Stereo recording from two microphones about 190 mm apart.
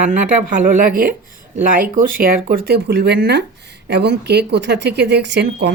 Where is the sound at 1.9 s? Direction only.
45° right (ahead or behind); by 5.7 s 65° right (ahead or behind).